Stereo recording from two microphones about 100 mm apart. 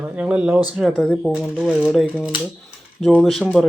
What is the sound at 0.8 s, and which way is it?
Speech, centre (ahead or behind).